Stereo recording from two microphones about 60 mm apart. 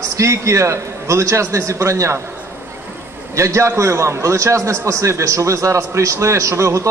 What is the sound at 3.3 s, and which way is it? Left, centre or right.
A man's voice, right.